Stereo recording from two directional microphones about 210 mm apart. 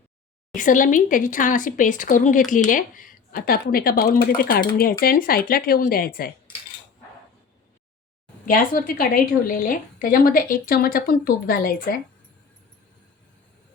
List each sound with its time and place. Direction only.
0.5 s a woman's voice: 40° left (ahead or behind)
8.4 s a woman's voice: 40° left (ahead or behind)